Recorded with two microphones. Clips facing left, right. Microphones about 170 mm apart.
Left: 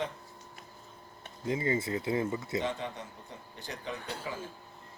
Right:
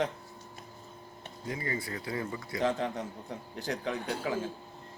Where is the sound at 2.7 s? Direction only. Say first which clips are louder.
Right 5 dB; 90° right.